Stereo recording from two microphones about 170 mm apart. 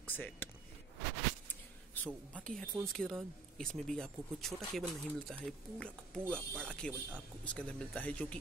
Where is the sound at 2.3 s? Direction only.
5° left (ahead or behind).